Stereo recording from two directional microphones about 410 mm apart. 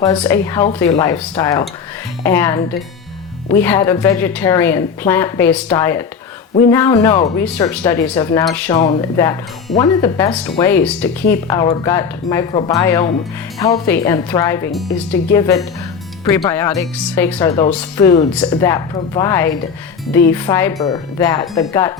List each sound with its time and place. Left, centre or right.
0.0 s a woman's voice: centre